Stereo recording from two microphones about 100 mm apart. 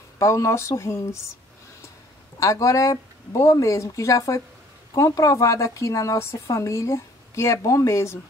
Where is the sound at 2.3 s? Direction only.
35° left (ahead or behind).